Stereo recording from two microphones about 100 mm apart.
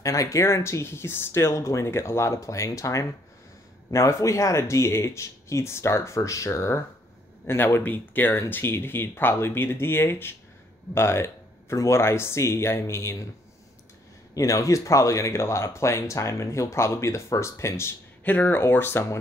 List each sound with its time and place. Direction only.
0.0 s speech: 35° left (ahead or behind)
14.3 s speech: 35° left (ahead or behind)